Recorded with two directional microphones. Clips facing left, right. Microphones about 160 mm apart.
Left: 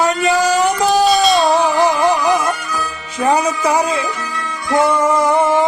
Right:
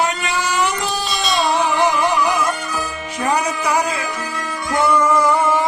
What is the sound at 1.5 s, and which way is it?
Music, 35° left (ahead or behind).